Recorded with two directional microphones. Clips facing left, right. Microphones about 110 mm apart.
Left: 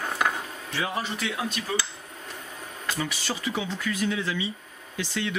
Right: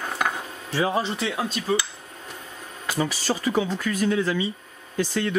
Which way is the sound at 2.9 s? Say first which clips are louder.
Right 8 dB; 40° right (ahead or behind).